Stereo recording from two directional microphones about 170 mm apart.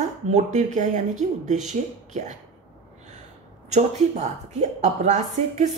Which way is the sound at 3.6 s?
45° right (ahead or behind).